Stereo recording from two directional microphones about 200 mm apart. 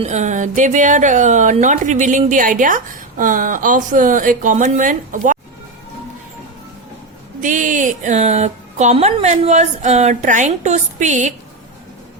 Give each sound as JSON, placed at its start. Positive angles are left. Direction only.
{"t": 0.0, "sound": "speech", "side_deg": -35}
{"t": 7.4, "sound": "speech", "side_deg": -40}